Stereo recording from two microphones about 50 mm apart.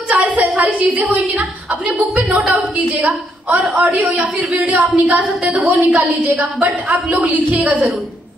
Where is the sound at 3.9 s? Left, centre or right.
Right.